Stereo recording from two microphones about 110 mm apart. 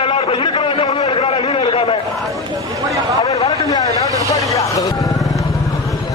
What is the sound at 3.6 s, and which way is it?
Vehicle, 35° left (ahead or behind).